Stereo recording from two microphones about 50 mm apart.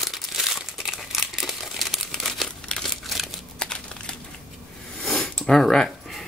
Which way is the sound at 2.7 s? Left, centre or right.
Centre.